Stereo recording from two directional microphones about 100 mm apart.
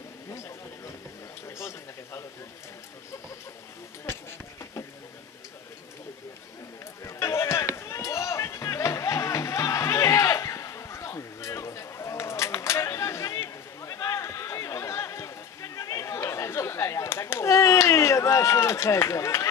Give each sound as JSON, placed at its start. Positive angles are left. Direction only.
{"t": 7.1, "sound": "run", "side_deg": 30}